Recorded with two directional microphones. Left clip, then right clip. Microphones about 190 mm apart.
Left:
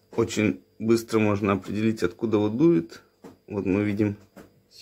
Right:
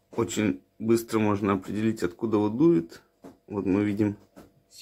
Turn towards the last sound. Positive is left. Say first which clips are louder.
# left 1 dB
turn(degrees=0)  # may be behind; listen again after turning